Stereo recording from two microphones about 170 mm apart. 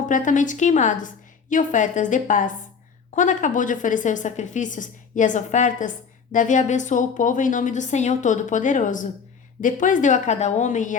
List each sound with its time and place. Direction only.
0.1 s a woman's voice: 50° left (ahead or behind)